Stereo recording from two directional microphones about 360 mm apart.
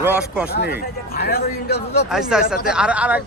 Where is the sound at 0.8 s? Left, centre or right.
Left.